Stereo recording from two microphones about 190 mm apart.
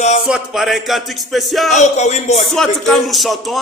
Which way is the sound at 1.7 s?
35° left (ahead or behind).